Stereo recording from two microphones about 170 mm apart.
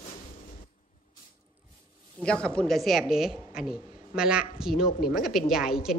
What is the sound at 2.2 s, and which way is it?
A woman's voice, 5° left (ahead or behind).